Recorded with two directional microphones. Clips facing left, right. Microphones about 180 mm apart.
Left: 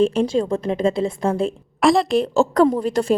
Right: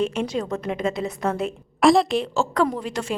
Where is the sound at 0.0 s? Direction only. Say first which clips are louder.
Left 6 dB; 30° left (ahead or behind).